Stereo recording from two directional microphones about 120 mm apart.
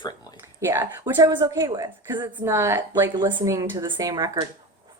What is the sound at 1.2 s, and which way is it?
A woman's voice, 30° right (ahead or behind).